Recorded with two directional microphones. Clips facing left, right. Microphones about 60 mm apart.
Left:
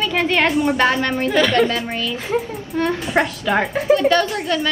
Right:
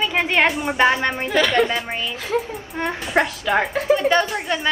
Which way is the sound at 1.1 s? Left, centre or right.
Centre.